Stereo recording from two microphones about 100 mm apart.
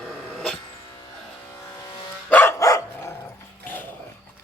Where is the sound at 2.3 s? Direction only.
25° left (ahead or behind).